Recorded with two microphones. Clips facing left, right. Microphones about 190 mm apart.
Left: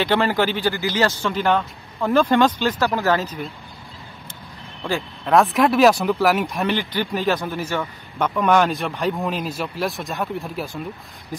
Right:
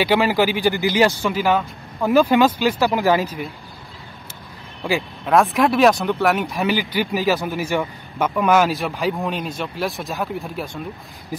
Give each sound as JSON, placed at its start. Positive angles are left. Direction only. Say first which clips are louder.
{"t": 0.0, "sound": "speech", "louder": "right 2 dB", "side_deg": -10}
{"t": 4.8, "sound": "speech", "louder": "right 2 dB", "side_deg": -5}